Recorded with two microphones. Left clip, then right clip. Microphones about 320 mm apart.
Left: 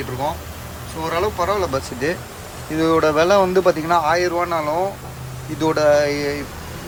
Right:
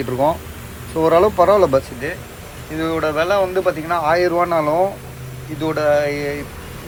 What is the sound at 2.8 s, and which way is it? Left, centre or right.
Speech, centre.